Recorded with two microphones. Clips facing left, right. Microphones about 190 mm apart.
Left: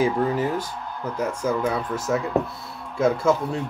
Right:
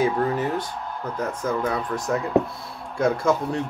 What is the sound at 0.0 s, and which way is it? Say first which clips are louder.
Speech: left 1 dB; 10° left (ahead or behind).